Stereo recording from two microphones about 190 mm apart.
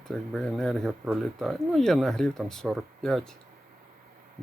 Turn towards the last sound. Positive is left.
turn(degrees=0)  # may be behind; listen again after turning